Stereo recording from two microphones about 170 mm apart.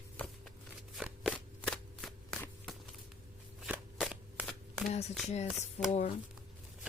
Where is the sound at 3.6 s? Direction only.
5° right (ahead or behind).